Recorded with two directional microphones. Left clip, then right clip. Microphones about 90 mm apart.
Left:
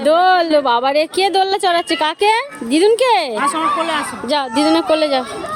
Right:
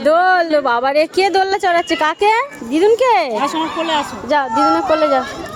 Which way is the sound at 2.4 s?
55° left (ahead or behind).